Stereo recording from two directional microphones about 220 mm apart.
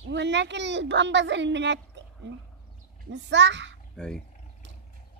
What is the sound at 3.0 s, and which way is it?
Speech, 55° right (ahead or behind).